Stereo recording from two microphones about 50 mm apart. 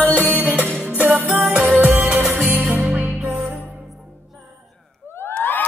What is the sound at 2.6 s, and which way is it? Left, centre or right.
Music, right.